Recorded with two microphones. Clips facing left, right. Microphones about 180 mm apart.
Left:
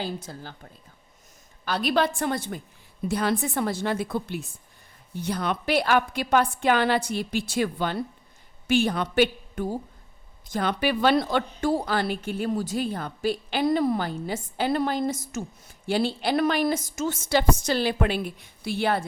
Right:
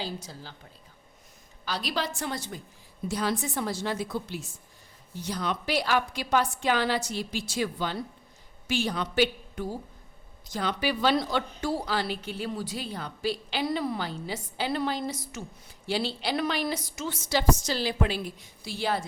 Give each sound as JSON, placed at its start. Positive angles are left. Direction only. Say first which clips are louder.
{"t": 0.0, "sound": "a woman's voice", "louder": "left 4 dB", "side_deg": 55}
{"t": 1.6, "sound": "a woman's voice", "louder": "left 7 dB", "side_deg": 55}